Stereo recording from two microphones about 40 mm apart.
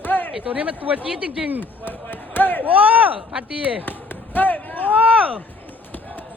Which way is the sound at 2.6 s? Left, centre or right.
Right.